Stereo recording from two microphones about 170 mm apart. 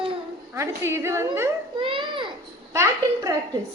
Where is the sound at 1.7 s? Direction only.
30° right (ahead or behind).